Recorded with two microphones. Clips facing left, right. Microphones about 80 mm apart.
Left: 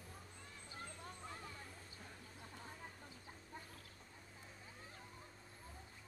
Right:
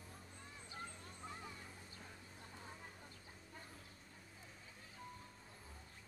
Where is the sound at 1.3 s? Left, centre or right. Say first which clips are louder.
Even; centre.